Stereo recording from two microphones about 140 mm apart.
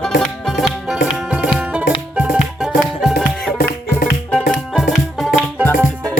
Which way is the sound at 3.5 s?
90° left.